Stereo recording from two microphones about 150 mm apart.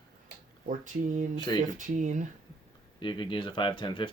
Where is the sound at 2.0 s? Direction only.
55° right (ahead or behind).